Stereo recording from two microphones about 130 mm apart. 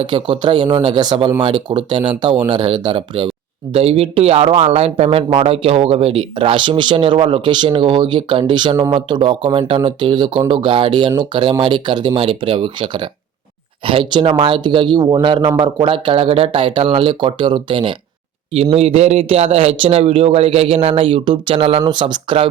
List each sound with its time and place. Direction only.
0.0 s speech: 35° right (ahead or behind)
3.7 s speech: 50° right (ahead or behind)
18.5 s speech: 50° right (ahead or behind)